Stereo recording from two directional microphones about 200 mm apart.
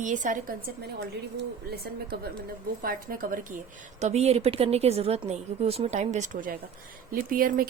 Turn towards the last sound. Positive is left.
turn(degrees=-45)  # may be behind; listen again after turning